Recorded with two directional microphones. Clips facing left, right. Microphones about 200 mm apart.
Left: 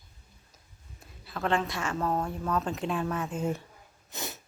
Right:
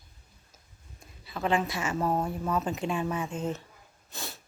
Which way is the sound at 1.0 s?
Centre (ahead or behind).